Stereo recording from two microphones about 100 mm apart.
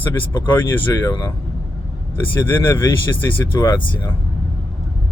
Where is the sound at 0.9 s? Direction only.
30° left (ahead or behind).